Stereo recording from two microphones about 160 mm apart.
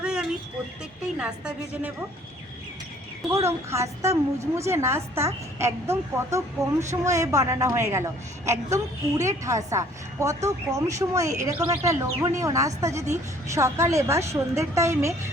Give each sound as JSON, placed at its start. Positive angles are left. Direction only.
{"t": 0.0, "sound": "a sound", "side_deg": -5}
{"t": 1.0, "sound": "a woman's voice", "side_deg": -10}
{"t": 3.3, "sound": "a woman's voice", "side_deg": -20}